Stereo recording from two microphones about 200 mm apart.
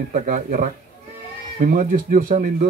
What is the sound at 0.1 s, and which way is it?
Speech, 40° right (ahead or behind).